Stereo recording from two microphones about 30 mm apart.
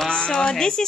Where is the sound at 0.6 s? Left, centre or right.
Left.